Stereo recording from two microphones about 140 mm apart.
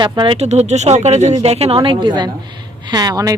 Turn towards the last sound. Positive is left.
turn(degrees=-25)  # may be behind; listen again after turning